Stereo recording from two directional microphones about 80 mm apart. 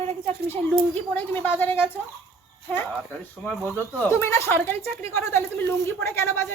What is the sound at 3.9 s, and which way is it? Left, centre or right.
Speech, left.